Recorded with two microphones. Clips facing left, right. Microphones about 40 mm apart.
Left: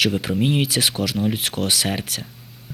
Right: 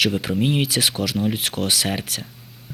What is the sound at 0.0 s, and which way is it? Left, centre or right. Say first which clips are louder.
Speech: even; centre.